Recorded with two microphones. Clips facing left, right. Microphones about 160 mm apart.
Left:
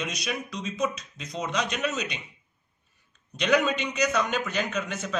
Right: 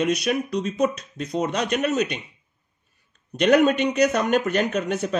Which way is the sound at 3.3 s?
55° right (ahead or behind).